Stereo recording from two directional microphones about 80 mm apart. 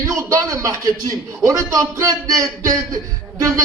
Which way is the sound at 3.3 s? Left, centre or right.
Right.